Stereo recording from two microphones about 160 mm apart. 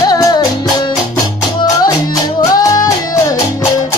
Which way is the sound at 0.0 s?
25° left (ahead or behind).